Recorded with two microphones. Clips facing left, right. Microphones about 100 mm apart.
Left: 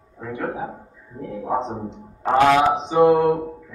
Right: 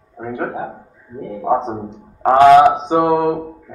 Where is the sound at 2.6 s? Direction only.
50° right (ahead or behind).